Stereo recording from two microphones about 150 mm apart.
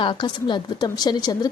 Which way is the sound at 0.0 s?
30° left (ahead or behind).